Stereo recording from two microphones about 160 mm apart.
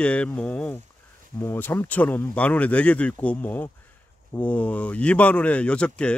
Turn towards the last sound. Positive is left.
turn(degrees=5)  # may be behind; listen again after turning